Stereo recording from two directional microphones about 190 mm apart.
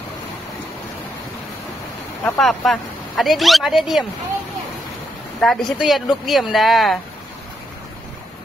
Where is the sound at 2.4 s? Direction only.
Centre (ahead or behind).